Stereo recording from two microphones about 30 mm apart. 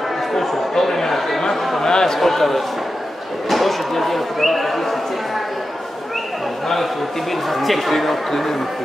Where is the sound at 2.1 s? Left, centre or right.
Centre.